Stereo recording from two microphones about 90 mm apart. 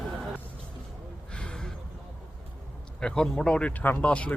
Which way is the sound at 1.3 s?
10° left (ahead or behind).